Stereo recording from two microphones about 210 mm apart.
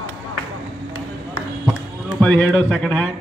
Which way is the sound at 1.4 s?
90° right.